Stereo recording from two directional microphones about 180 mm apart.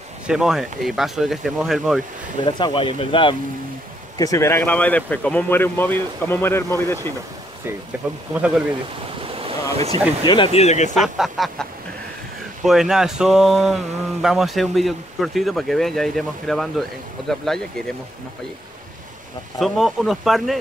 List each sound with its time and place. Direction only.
0.3 s speech: 5° right (ahead or behind)
2.4 s speech: 30° left (ahead or behind)
4.2 s speech: 15° left (ahead or behind)
8.0 s speech: 5° right (ahead or behind)
9.2 s waves: 30° right (ahead or behind)
10.2 s speech: 25° left (ahead or behind)
11.0 s speech: centre (ahead or behind)
12.6 s speech: centre (ahead or behind)
19.6 s speech: centre (ahead or behind)